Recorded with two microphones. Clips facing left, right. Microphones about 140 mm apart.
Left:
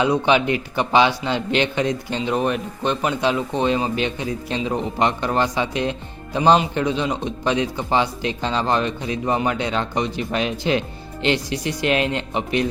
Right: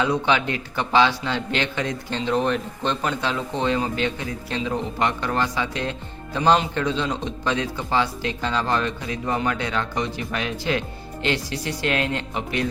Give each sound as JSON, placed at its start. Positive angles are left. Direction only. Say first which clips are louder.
{"t": 0.0, "sound": "a man's voice", "louder": "left 4 dB", "side_deg": 20}